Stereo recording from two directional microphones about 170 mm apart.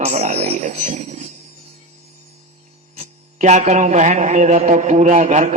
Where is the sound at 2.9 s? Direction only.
45° right (ahead or behind).